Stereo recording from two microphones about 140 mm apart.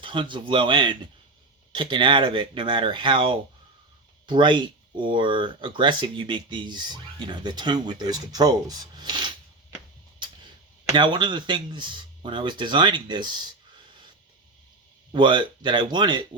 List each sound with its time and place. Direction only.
0.0 s speech: 35° right (ahead or behind)
10.2 s a sound: 35° right (ahead or behind)
10.9 s speech: 35° right (ahead or behind)
15.1 s speech: 35° right (ahead or behind)